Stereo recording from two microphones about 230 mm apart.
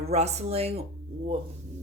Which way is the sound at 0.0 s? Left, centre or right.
Right.